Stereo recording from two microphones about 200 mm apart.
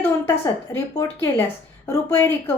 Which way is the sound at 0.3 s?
15° left (ahead or behind).